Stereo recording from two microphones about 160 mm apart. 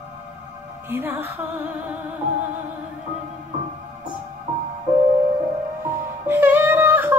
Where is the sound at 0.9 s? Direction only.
10° right (ahead or behind).